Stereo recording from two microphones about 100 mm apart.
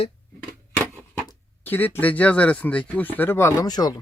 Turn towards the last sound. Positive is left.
turn(degrees=40)  # may be behind; listen again after turning